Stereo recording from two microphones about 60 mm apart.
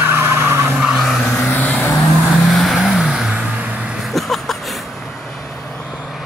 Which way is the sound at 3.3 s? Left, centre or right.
Centre.